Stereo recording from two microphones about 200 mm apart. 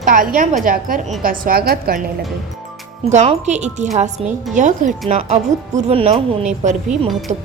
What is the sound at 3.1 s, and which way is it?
Speech, 35° right (ahead or behind).